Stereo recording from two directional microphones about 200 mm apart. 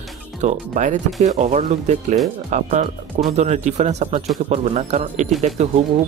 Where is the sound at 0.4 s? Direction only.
35° right (ahead or behind).